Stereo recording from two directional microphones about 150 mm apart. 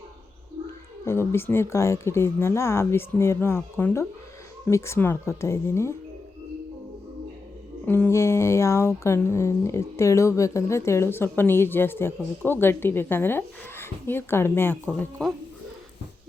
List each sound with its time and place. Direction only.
1.0 s speech: 15° left (ahead or behind)
7.9 s speech: 15° left (ahead or behind)